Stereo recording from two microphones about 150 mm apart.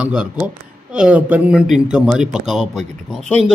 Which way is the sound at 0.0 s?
5° right (ahead or behind).